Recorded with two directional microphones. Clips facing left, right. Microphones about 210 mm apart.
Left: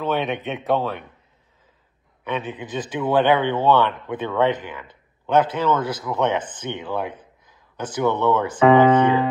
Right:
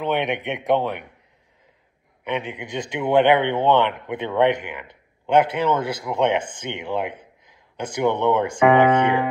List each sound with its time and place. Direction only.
0.0 s a man's voice: 20° right (ahead or behind)
2.2 s a man's voice: 15° right (ahead or behind)